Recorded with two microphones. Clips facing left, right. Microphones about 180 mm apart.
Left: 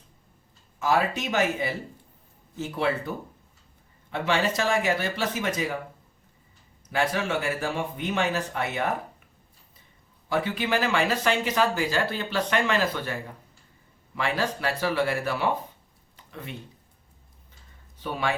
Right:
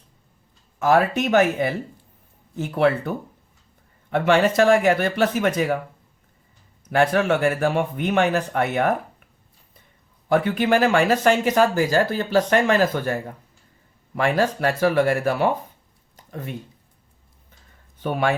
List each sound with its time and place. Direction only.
0.8 s speech: 55° right (ahead or behind)
4.1 s speech: 55° right (ahead or behind)
6.9 s speech: 60° right (ahead or behind)
10.2 s speech: 55° right (ahead or behind)
16.1 s a sound: 45° right (ahead or behind)
18.0 s speech: 55° right (ahead or behind)